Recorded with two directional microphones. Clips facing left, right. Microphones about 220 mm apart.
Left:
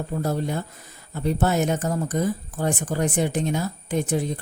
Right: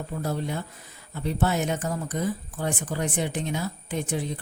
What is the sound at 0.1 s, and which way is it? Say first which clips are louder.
Speech: left 4 dB; 45° left (ahead or behind).